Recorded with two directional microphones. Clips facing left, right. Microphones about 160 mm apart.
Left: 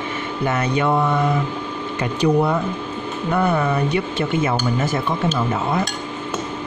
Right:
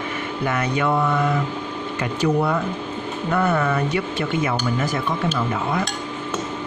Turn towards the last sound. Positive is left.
turn(degrees=25)  # may be behind; listen again after turning